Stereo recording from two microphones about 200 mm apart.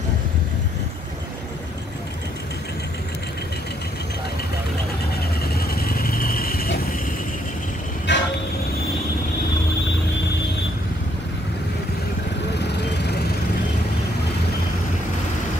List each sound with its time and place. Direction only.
5.4 s vehicle: 50° left (ahead or behind)
8.1 s vehicle: 60° left (ahead or behind)
12.5 s vehicle: 55° left (ahead or behind)